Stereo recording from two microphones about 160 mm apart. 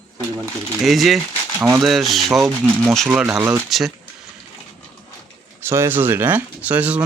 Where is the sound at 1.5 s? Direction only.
15° right (ahead or behind).